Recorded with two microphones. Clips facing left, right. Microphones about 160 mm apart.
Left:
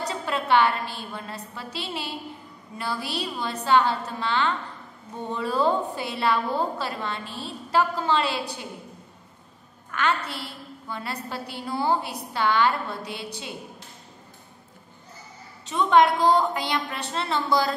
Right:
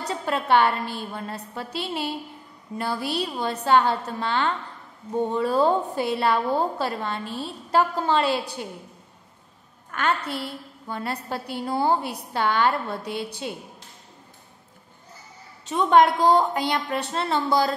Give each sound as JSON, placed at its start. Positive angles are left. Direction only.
{"t": 0.2, "sound": "a woman's voice", "side_deg": -45}
{"t": 9.9, "sound": "a woman's voice", "side_deg": -45}
{"t": 15.6, "sound": "a woman's voice", "side_deg": -45}